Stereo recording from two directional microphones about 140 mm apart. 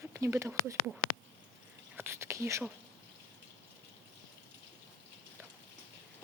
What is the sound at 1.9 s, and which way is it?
Whispering, 15° right (ahead or behind).